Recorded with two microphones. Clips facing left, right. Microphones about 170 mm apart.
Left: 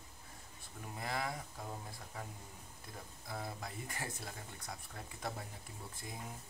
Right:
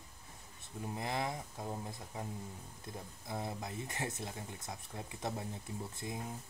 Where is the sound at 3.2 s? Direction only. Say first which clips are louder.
Right 3 dB; 20° right (ahead or behind).